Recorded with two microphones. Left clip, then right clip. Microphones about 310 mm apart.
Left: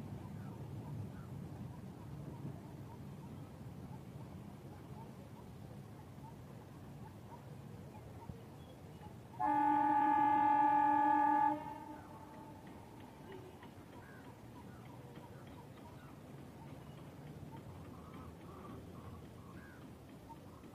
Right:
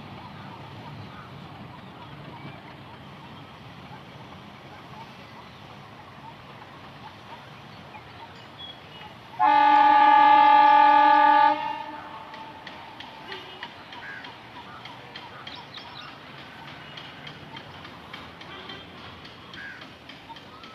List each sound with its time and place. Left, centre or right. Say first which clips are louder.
9.4 s train: right 16 dB; right